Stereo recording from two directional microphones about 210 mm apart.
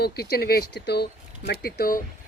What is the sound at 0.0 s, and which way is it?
Speech, 50° left (ahead or behind).